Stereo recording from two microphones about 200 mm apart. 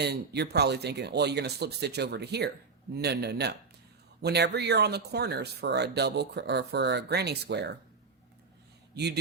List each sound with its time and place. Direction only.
0.0 s speech: 55° right (ahead or behind)